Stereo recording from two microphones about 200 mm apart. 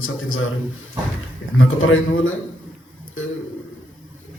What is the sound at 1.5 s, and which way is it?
Speech, 90° left.